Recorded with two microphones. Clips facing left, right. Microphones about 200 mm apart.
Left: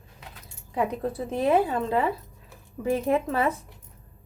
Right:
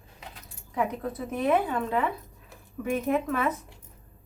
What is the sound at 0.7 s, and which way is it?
A woman's voice, 30° left (ahead or behind).